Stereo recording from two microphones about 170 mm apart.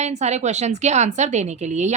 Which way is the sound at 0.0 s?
40° right (ahead or behind).